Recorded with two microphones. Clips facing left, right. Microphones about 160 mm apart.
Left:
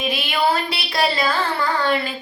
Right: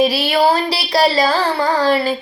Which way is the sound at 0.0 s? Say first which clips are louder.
Right 7 dB; 35° right (ahead or behind).